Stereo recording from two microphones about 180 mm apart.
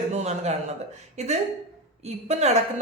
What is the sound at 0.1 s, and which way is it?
A man's voice, 40° right (ahead or behind).